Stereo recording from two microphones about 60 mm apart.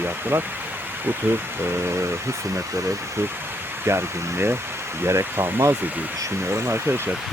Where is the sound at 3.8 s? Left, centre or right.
Right.